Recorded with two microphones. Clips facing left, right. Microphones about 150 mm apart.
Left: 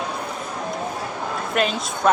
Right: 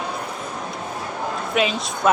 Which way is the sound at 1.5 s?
5° right (ahead or behind).